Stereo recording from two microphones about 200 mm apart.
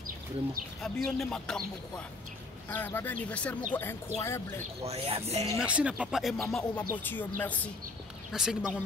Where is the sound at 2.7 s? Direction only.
10° left (ahead or behind).